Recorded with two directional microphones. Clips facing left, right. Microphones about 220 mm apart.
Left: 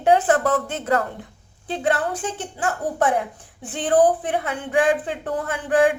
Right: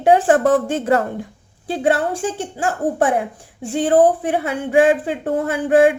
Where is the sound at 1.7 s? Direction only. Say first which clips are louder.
Right 4 dB; 10° right (ahead or behind).